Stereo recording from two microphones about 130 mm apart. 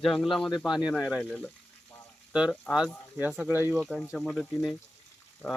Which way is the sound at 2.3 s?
5° right (ahead or behind).